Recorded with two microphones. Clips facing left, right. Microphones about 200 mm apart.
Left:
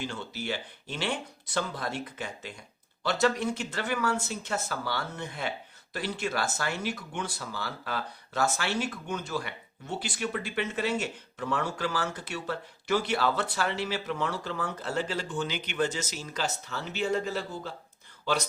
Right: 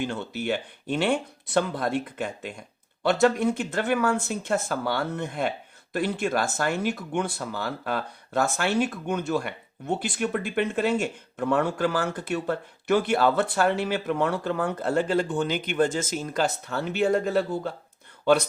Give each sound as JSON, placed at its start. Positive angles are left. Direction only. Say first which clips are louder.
{"t": 0.0, "sound": "speech", "louder": "right 6 dB", "side_deg": -55}